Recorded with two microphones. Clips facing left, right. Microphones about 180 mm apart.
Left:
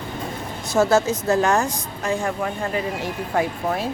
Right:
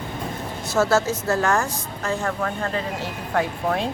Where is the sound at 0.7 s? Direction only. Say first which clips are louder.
Left 2 dB; 15° left (ahead or behind).